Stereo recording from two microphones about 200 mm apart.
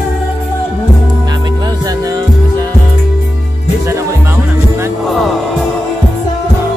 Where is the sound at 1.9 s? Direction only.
20° right (ahead or behind).